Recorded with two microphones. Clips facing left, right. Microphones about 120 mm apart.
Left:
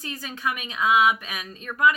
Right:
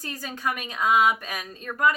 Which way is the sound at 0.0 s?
40° right (ahead or behind).